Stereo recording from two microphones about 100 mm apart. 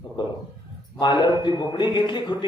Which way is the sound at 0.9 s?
50° left (ahead or behind).